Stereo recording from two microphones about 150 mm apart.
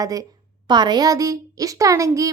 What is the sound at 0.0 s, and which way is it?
A woman's voice, 25° right (ahead or behind).